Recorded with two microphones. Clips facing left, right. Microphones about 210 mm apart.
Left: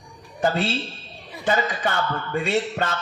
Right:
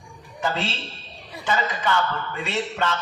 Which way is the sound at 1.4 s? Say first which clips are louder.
Left 2 dB; 45° left (ahead or behind).